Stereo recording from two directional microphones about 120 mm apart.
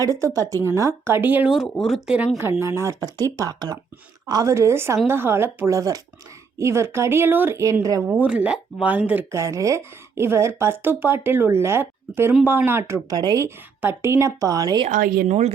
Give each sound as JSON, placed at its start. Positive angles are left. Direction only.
{"t": 0.0, "sound": "speech", "side_deg": -25}
{"t": 1.6, "sound": "speech", "side_deg": 5}
{"t": 2.4, "sound": "speech", "side_deg": -20}
{"t": 8.0, "sound": "speech", "side_deg": -15}
{"t": 9.3, "sound": "speech", "side_deg": -25}
{"t": 14.8, "sound": "a woman's voice", "side_deg": -65}